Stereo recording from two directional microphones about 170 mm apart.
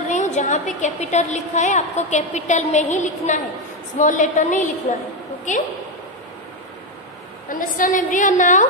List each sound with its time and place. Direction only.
0.1 s a woman's voice: 45° left (ahead or behind)
7.4 s a woman's voice: 50° left (ahead or behind)